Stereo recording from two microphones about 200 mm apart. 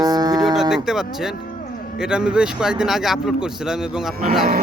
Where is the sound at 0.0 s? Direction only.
20° right (ahead or behind).